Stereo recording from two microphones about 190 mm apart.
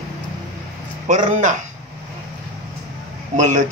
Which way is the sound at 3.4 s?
40° right (ahead or behind).